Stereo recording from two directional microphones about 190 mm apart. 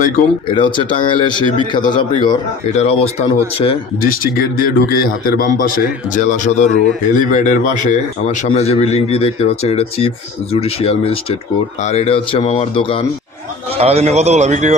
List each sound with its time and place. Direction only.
0.5 s speech: 25° left (ahead or behind)
2.7 s a man's voice: 35° left (ahead or behind)
4.0 s a man's voice: 50° left (ahead or behind); by 13.1 s 25° left (ahead or behind)
13.7 s a man's voice: 30° right (ahead or behind)